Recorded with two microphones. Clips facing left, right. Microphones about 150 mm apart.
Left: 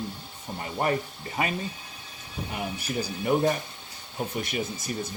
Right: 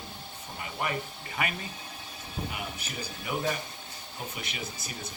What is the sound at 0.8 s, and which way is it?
Speech, 40° left (ahead or behind).